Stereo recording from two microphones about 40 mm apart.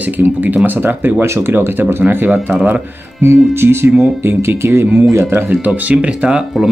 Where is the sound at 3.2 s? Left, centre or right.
Right.